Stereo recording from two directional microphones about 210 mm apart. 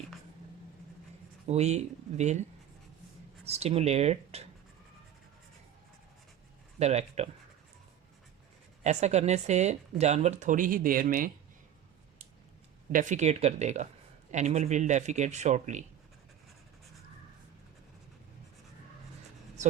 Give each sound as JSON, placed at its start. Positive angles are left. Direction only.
{"t": 1.5, "sound": "speech", "side_deg": -30}
{"t": 3.4, "sound": "speech", "side_deg": -30}
{"t": 6.7, "sound": "speech", "side_deg": -30}
{"t": 8.8, "sound": "speech", "side_deg": -30}
{"t": 12.9, "sound": "speech", "side_deg": -35}